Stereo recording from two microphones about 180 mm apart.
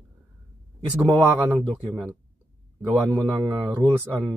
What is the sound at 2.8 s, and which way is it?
Speech, 10° right (ahead or behind).